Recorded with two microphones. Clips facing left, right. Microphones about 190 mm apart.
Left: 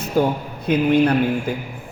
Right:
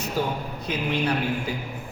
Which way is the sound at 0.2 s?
50° left (ahead or behind).